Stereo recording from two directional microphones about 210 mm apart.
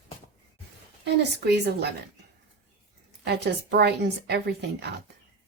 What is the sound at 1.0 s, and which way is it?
Speech, 55° right (ahead or behind).